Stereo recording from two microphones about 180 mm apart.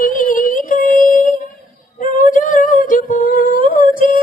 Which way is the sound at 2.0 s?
50° left (ahead or behind).